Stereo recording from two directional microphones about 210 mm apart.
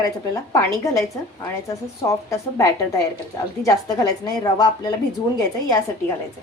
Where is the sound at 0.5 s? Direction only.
15° left (ahead or behind).